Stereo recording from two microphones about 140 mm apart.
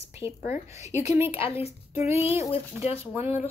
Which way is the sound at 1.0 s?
15° right (ahead or behind).